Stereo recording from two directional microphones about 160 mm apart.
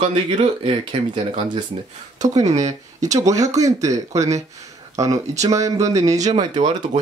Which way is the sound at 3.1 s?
20° right (ahead or behind).